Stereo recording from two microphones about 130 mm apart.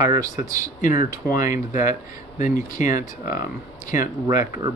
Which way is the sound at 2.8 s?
65° left (ahead or behind).